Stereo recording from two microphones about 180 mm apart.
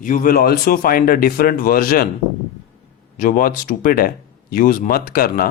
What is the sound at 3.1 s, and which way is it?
Speech, 50° left (ahead or behind).